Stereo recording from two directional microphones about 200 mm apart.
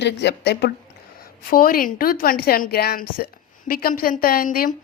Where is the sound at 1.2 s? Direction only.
45° left (ahead or behind).